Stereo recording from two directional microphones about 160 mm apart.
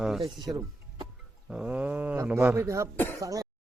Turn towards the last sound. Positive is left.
turn(degrees=-20)  # may be behind; listen again after turning